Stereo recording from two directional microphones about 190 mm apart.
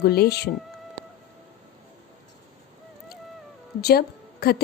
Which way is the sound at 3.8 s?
55° left (ahead or behind).